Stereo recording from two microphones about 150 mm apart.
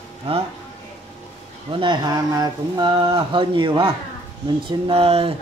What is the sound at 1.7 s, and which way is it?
Speech, 30° right (ahead or behind).